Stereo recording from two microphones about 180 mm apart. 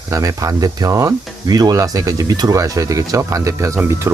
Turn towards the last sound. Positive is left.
turn(degrees=-15)  # may be behind; listen again after turning